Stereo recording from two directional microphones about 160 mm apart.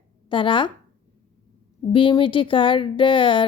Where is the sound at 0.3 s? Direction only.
30° left (ahead or behind).